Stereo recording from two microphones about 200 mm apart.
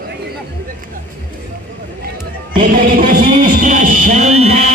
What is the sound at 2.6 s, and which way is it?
Music, 45° right (ahead or behind).